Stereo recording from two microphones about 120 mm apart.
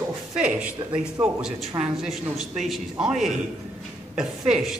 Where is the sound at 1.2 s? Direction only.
5° right (ahead or behind).